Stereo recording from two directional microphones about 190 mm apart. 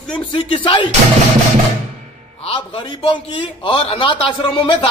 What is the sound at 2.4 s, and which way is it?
A man's voice, 25° left (ahead or behind).